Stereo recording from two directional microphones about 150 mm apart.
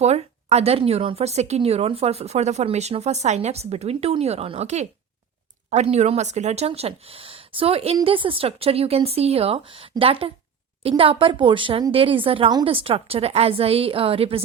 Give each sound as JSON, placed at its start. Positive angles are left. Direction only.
{"t": 0.0, "sound": "speech", "side_deg": -45}